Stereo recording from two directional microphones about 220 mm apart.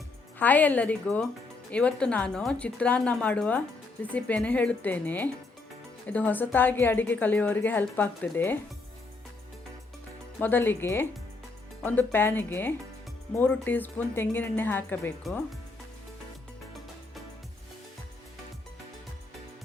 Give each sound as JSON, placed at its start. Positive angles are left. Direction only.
{"t": 0.3, "sound": "a woman's voice", "side_deg": 5}
{"t": 10.4, "sound": "a woman's voice", "side_deg": 10}